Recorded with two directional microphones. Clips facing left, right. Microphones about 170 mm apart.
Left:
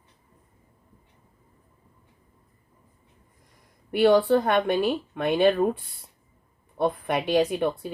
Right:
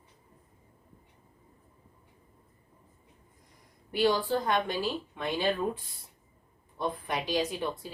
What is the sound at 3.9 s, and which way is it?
Speech, 60° left (ahead or behind).